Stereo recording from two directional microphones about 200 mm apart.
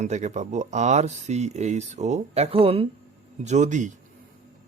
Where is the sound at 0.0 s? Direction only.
35° right (ahead or behind).